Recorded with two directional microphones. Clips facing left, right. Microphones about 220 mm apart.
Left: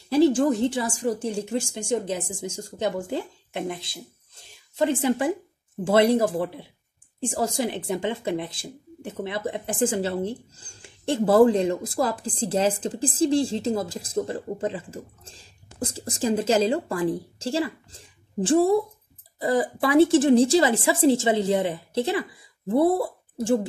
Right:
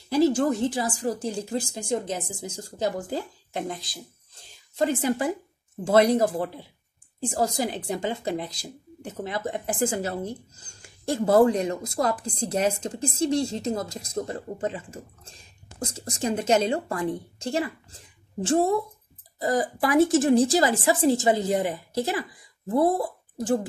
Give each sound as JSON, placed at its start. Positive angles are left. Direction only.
{"t": 0.1, "sound": "a woman's voice", "side_deg": 30}